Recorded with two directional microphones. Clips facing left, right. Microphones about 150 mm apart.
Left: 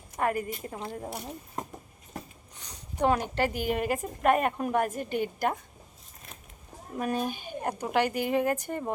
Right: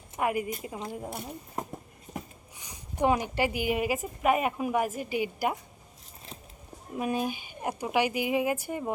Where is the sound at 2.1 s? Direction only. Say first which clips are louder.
Right 1 dB; 10° right (ahead or behind).